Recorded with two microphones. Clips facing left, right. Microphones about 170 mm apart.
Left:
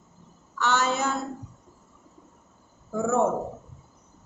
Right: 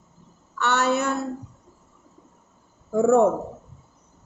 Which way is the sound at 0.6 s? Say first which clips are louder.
Right 3 dB; 65° right (ahead or behind).